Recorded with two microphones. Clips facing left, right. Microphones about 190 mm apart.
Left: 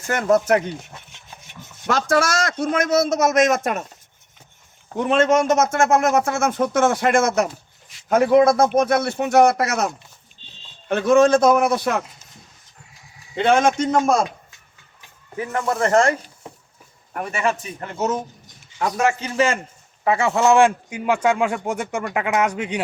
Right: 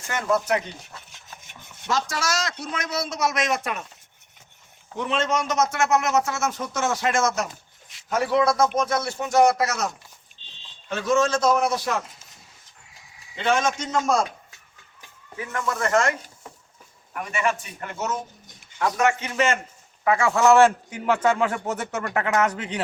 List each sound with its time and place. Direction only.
0.1 s a man's voice: 45° left (ahead or behind)
1.9 s a man's voice: 60° left (ahead or behind)
4.9 s a man's voice: 50° left (ahead or behind)
13.3 s speech: 60° left (ahead or behind)
15.4 s a man's voice: 35° left (ahead or behind); by 22.8 s 10° left (ahead or behind)